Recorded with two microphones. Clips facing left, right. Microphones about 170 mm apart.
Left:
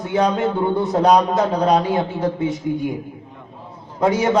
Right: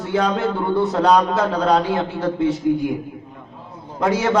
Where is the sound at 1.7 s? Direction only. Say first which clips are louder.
Left 1 dB; 20° left (ahead or behind).